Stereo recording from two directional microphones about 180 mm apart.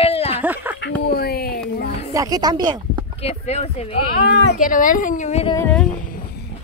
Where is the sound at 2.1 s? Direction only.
20° right (ahead or behind).